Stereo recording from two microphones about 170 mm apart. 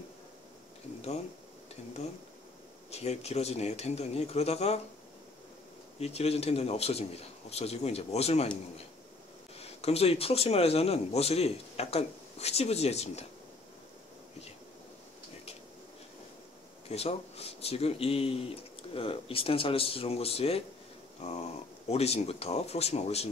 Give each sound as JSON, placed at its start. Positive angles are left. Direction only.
{"t": 2.9, "sound": "speech", "side_deg": 40}
{"t": 5.9, "sound": "speech", "side_deg": 40}
{"t": 9.6, "sound": "speech", "side_deg": 35}
{"t": 16.9, "sound": "speech", "side_deg": 35}